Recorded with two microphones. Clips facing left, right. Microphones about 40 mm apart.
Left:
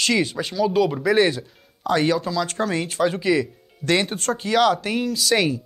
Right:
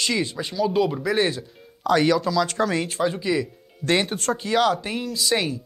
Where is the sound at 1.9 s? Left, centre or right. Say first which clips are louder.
Right 1 dB; left.